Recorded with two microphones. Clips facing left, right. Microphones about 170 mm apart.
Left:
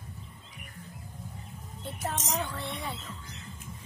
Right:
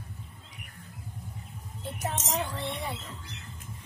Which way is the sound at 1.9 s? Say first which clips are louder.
Right 1 dB; 10° right (ahead or behind).